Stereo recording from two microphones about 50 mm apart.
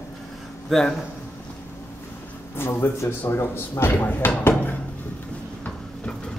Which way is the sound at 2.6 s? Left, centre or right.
Left.